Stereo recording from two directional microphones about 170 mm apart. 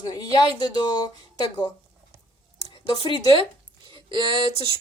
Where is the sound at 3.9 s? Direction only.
30° right (ahead or behind).